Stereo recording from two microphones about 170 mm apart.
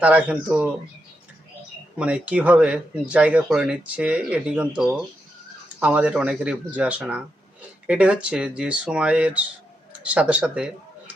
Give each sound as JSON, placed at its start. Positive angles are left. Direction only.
{"t": 0.0, "sound": "speech", "side_deg": -10}
{"t": 2.0, "sound": "a man's voice", "side_deg": -5}